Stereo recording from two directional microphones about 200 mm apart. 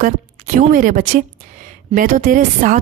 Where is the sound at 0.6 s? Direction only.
40° right (ahead or behind).